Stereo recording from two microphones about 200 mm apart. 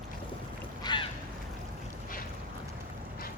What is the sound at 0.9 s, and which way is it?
Goose, 20° left (ahead or behind).